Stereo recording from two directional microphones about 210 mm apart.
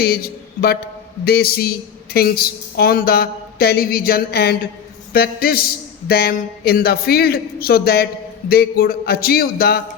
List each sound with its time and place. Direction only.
0.0 s a man's voice: 45° left (ahead or behind)